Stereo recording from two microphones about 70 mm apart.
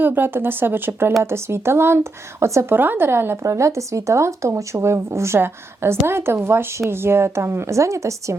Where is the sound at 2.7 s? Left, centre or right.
Right.